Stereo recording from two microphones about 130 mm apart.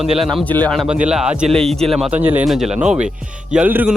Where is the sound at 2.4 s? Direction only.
Centre (ahead or behind).